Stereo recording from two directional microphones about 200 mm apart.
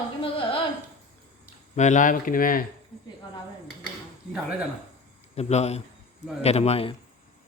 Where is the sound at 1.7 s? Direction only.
40° left (ahead or behind).